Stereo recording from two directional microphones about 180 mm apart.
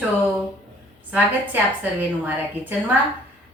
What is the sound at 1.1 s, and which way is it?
A woman's voice, 10° right (ahead or behind).